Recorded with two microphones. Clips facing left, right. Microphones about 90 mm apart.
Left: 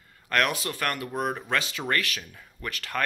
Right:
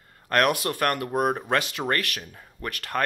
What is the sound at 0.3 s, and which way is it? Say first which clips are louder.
Speech: right 4 dB; 50° right (ahead or behind).